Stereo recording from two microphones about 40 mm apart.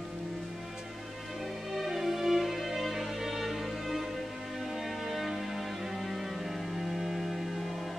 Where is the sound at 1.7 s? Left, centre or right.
Centre.